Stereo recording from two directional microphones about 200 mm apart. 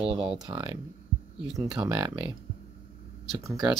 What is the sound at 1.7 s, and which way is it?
Speech, 20° right (ahead or behind).